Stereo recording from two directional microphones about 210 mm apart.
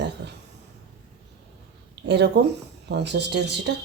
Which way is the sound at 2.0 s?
55° right (ahead or behind).